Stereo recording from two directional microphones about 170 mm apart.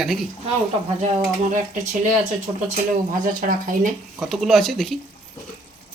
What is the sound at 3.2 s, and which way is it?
Speech, 50° right (ahead or behind).